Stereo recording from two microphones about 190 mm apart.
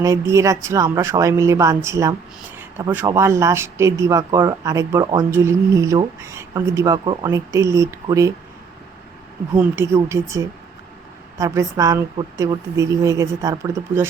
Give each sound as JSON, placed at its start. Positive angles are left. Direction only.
{"t": 0.0, "sound": "speech", "side_deg": -15}
{"t": 9.6, "sound": "speech", "side_deg": -15}